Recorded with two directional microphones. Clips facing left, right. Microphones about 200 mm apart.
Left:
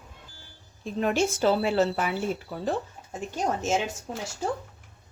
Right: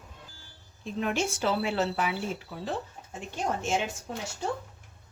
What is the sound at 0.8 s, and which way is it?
Speech, 40° left (ahead or behind).